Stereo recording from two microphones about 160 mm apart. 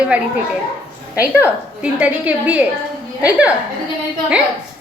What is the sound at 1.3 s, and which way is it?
A woman's voice, 10° right (ahead or behind).